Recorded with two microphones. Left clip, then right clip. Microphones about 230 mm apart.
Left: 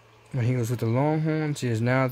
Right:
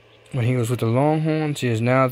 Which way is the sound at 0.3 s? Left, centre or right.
Centre.